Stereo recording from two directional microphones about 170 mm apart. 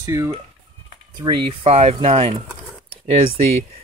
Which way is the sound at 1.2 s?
30° right (ahead or behind).